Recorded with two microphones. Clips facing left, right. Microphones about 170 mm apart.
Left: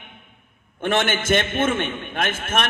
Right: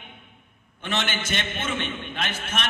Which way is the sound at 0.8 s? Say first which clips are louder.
Left 7 dB; 50° left (ahead or behind).